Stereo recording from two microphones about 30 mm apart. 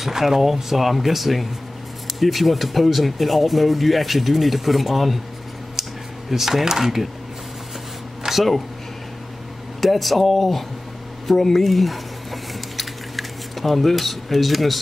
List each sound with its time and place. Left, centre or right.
0.1 s speech: centre
6.3 s speech: centre
8.2 s a sound: right
9.8 s speech: centre
11.2 s speech: centre
11.6 s squish: centre